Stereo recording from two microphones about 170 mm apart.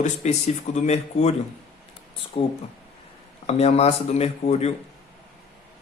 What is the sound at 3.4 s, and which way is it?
Speech, 40° left (ahead or behind).